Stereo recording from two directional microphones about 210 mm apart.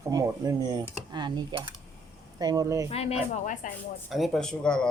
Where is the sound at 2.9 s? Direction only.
30° left (ahead or behind).